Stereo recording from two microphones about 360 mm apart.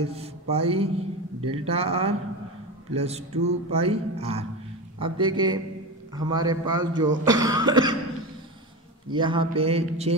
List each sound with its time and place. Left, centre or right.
0.0 s speech: centre
9.1 s speech: centre